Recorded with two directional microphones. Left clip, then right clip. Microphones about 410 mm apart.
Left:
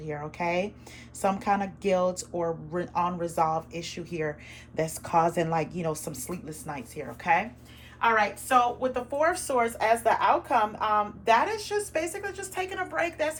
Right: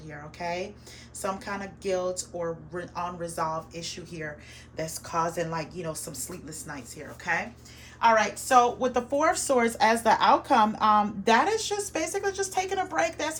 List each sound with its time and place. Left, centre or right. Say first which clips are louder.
0.3 s speech: left 3 dB; centre
8.0 s a woman's voice: right 2 dB; centre